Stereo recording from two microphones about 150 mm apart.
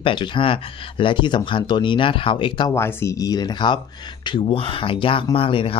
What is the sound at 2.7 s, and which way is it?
Speech, 15° left (ahead or behind).